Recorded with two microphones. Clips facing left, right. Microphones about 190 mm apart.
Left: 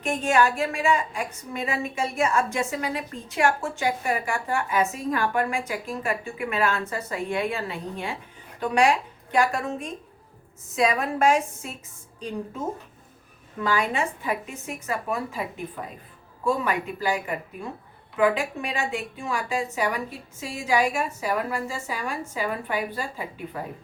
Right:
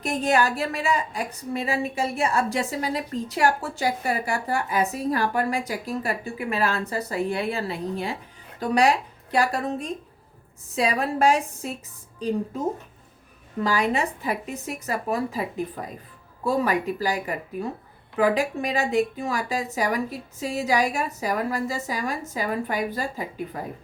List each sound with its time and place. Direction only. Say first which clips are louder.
0.0 s a woman's voice: even; 35° right (ahead or behind)
13.6 s a woman's voice: right 2 dB; 35° right (ahead or behind)